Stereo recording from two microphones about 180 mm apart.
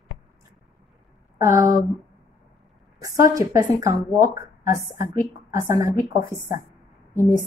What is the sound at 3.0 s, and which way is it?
A woman's voice, 20° right (ahead or behind).